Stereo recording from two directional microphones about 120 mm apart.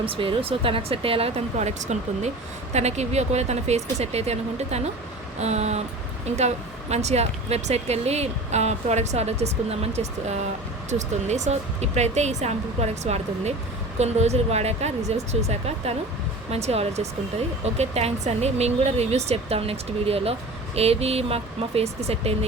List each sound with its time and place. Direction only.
0.0 s speech: 50° right (ahead or behind)
1.5 s speech: 75° right (ahead or behind)
10.8 s speech: 80° right; by 22.4 s 60° right (ahead or behind)